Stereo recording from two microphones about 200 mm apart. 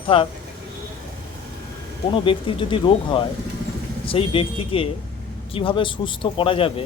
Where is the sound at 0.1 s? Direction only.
25° left (ahead or behind).